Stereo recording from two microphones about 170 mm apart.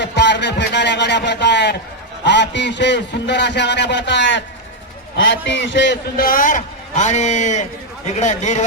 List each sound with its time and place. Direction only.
0.0 s music: 90° left
2.2 s a man's voice: 90° left; by 8.6 s 45° left (ahead or behind)